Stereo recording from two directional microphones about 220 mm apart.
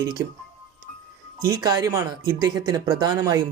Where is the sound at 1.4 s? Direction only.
15° right (ahead or behind).